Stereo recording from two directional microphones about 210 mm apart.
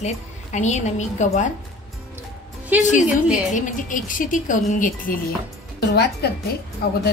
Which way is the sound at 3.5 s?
40° left (ahead or behind).